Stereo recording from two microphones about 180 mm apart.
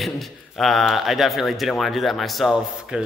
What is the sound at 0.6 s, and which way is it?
Speech, centre (ahead or behind).